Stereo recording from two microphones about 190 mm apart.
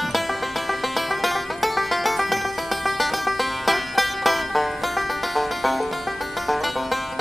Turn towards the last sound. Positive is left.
turn(degrees=0)  # may be behind; listen again after turning